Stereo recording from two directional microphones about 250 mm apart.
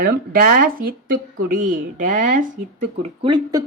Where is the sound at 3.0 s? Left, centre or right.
Right.